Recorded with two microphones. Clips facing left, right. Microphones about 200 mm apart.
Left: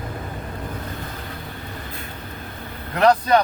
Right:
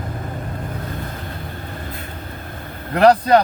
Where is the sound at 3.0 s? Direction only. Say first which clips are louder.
Right 4 dB; 35° right (ahead or behind).